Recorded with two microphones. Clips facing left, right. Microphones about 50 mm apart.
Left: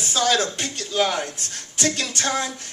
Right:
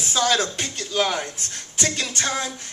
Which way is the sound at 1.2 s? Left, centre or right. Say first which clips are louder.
Left 1 dB; right.